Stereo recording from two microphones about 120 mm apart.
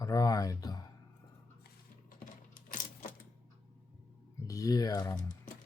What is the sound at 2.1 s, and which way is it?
Typing, 90° left.